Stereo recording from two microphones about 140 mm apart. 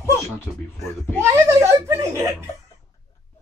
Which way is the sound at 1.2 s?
20° right (ahead or behind).